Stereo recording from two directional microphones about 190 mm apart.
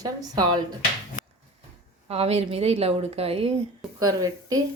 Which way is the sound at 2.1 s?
30° right (ahead or behind).